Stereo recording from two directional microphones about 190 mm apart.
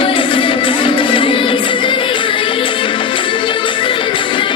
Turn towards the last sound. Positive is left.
turn(degrees=25)  # may be behind; listen again after turning